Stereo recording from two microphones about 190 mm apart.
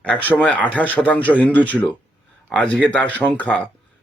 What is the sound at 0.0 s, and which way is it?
Speech, 10° left (ahead or behind).